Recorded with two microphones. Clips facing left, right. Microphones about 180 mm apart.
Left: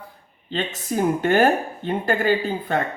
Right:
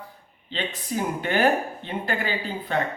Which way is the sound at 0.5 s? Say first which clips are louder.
Left 4 dB; 45° left (ahead or behind).